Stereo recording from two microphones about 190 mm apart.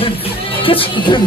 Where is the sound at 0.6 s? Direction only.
25° left (ahead or behind).